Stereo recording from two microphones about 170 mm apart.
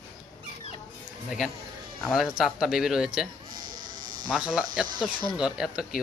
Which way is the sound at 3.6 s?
55° right (ahead or behind).